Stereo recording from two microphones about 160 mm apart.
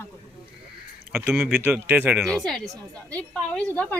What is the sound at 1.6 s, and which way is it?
Speech, 10° right (ahead or behind).